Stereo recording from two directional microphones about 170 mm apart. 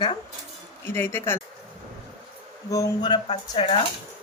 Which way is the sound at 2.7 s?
25° left (ahead or behind).